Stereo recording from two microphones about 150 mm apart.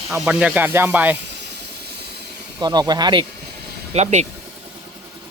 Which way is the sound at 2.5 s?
25° right (ahead or behind).